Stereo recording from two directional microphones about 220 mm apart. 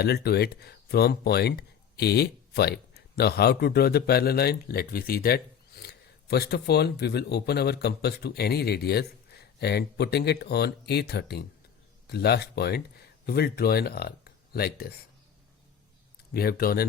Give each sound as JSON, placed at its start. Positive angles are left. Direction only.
{"t": 0.0, "sound": "speech", "side_deg": 45}
{"t": 16.3, "sound": "speech", "side_deg": 45}